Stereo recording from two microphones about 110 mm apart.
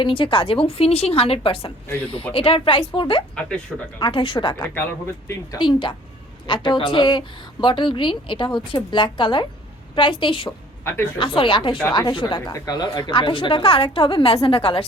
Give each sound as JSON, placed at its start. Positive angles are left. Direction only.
{"t": 0.0, "sound": "a woman's voice", "side_deg": 50}
{"t": 3.7, "sound": "speech", "side_deg": 0}
{"t": 4.0, "sound": "speech", "side_deg": 50}
{"t": 4.7, "sound": "speech", "side_deg": 20}
{"t": 5.5, "sound": "speech", "side_deg": 45}
{"t": 10.8, "sound": "speech", "side_deg": 20}
{"t": 11.2, "sound": "speech", "side_deg": 50}